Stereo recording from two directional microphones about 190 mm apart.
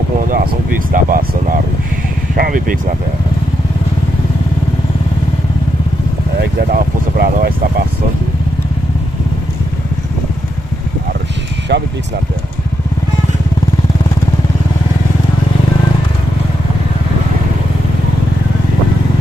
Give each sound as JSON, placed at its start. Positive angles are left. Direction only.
{"t": 0.9, "sound": "speech", "side_deg": -45}
{"t": 6.4, "sound": "speech", "side_deg": -50}
{"t": 11.7, "sound": "speech", "side_deg": -60}